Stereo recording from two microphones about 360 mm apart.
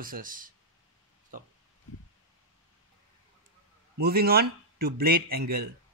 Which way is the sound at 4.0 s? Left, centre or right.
Right.